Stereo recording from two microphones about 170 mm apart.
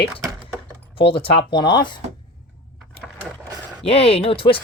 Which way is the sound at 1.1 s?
30° left (ahead or behind).